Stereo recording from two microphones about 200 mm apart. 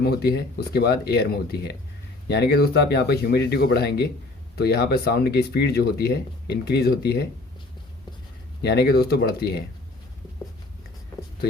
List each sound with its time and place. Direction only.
0.0 s speech: 50° left (ahead or behind)
8.6 s speech: 55° left (ahead or behind)